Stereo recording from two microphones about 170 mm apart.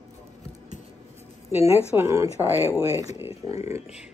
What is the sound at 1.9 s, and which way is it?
Speech, 15° right (ahead or behind).